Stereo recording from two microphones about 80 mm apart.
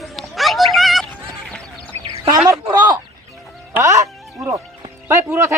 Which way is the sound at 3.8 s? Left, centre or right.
Right.